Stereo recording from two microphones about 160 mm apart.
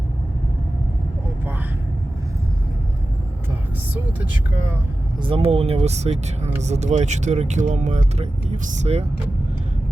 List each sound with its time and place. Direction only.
5.2 s speech: 35° right (ahead or behind)